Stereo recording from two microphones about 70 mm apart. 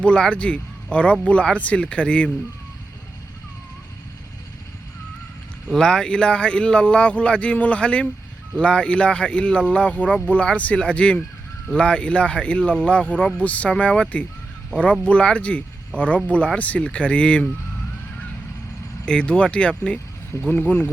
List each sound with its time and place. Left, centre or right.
0.0 s speech: centre
5.7 s speech: centre
19.0 s speech: centre